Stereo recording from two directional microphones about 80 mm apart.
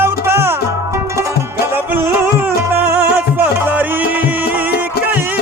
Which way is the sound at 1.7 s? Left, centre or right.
Right.